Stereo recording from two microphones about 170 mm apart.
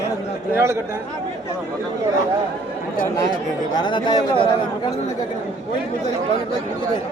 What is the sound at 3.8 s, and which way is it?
Speech, 25° left (ahead or behind).